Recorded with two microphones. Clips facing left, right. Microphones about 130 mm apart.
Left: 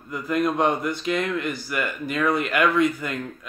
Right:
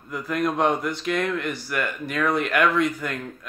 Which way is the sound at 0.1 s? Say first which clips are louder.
Left 2 dB; centre (ahead or behind).